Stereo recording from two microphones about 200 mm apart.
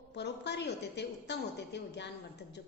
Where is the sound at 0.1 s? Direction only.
55° left (ahead or behind).